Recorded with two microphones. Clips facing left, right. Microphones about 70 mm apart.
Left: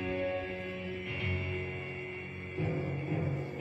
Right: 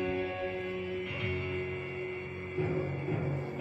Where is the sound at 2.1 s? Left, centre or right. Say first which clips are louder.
Right 3 dB; centre.